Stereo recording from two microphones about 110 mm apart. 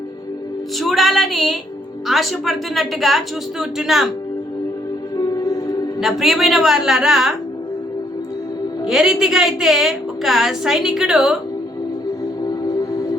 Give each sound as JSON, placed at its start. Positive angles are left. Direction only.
{"t": 0.8, "sound": "a woman's voice", "side_deg": 0}
{"t": 5.1, "sound": "music", "side_deg": 35}
{"t": 6.0, "sound": "a woman's voice", "side_deg": 0}
{"t": 8.9, "sound": "a woman's voice", "side_deg": -5}